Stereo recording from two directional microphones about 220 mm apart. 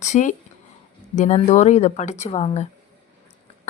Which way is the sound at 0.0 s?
35° left (ahead or behind).